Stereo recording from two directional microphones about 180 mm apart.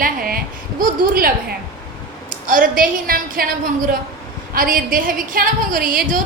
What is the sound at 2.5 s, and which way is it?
A woman's voice, 50° right (ahead or behind).